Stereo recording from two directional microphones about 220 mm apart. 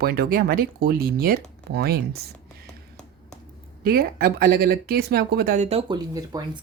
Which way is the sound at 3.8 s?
40° right (ahead or behind).